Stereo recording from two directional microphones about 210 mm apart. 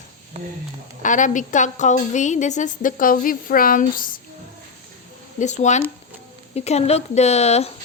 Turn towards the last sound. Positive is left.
turn(degrees=30)  # may be behind; listen again after turning